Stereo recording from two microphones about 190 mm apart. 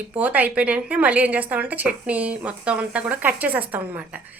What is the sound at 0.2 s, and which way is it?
A woman's voice, 10° right (ahead or behind).